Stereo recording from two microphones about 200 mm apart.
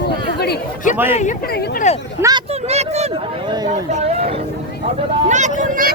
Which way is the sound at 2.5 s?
30° right (ahead or behind).